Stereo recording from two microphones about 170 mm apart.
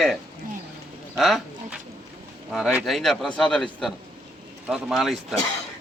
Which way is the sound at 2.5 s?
5° right (ahead or behind).